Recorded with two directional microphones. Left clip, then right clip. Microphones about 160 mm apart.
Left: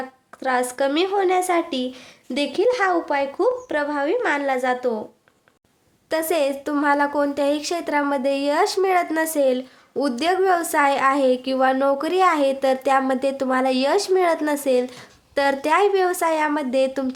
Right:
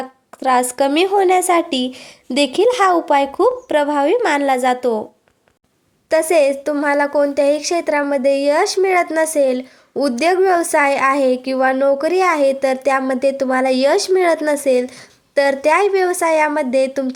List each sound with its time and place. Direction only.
0.3 s speech: 30° right (ahead or behind)
6.1 s a woman's voice: 25° right (ahead or behind)